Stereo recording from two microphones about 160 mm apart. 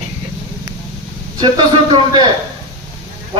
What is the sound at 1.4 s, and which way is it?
Speech, 30° right (ahead or behind).